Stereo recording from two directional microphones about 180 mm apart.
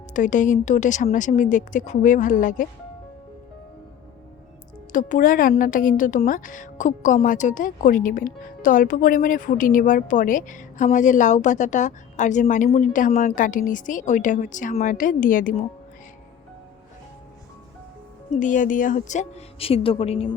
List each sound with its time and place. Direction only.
0.1 s a woman's voice: 45° left (ahead or behind)
4.9 s a woman's voice: 45° left (ahead or behind)
18.3 s a woman's voice: 45° left (ahead or behind)